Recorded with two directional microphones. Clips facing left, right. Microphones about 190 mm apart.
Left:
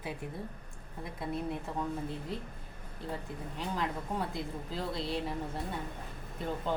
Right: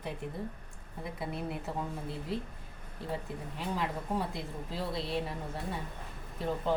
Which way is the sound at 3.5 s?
5° right (ahead or behind).